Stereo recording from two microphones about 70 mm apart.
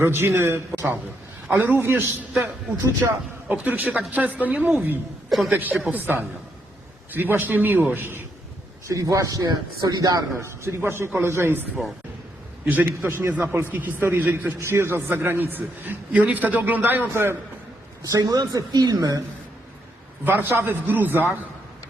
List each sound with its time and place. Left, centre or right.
0.0 s a man's voice: right
3.5 s a man's voice: right
8.9 s a man's voice: right
9.8 s speech: right
10.4 s a man's voice: right
12.6 s a man's voice: right
18.1 s speech: right
20.2 s a man's voice: right